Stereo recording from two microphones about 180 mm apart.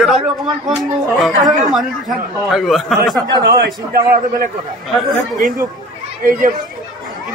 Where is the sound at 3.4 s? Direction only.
55° right (ahead or behind).